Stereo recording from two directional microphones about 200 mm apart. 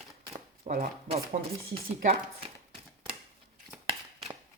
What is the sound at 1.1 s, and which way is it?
Speech, 25° right (ahead or behind).